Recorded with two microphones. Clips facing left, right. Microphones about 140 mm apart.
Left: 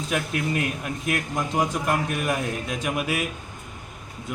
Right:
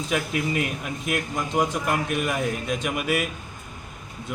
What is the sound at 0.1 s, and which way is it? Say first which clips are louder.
A man's voice: even; centre (ahead or behind).